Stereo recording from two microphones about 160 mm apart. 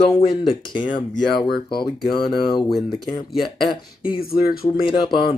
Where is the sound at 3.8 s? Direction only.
35° left (ahead or behind).